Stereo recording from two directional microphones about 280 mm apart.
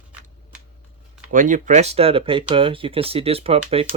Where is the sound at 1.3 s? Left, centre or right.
Right.